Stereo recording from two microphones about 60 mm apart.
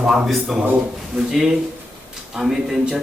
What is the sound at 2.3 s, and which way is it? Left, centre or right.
Speech, centre.